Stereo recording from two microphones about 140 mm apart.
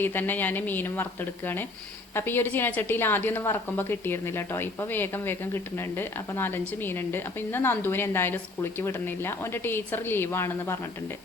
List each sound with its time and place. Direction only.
0.0 s a woman's voice: 15° left (ahead or behind)